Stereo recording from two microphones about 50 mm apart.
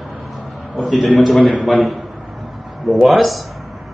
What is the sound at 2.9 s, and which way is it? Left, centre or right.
Speech, centre.